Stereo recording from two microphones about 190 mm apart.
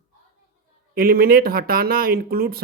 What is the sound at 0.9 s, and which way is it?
Speech, 50° right (ahead or behind).